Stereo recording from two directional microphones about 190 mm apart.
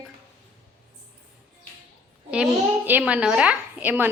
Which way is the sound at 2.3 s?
5° right (ahead or behind).